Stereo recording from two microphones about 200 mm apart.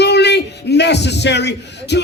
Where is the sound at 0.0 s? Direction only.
55° left (ahead or behind).